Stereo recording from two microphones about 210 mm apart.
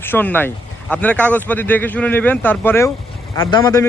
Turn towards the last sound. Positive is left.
turn(degrees=15)  # may be behind; listen again after turning